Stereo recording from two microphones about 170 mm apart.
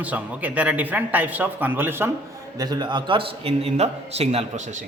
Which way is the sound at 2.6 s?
25° right (ahead or behind).